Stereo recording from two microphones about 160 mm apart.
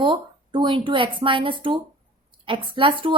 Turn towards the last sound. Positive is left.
turn(degrees=-30)  # may be behind; listen again after turning